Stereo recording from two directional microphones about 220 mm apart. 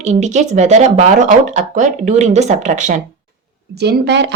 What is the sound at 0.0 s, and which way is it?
Speech, 30° right (ahead or behind).